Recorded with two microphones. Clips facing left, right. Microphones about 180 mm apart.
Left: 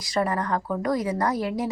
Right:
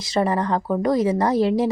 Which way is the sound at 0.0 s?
25° right (ahead or behind).